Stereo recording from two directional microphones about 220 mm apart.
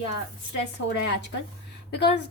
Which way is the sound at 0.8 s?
90° left.